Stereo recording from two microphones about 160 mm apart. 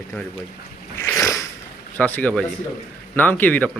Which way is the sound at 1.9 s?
10° left (ahead or behind).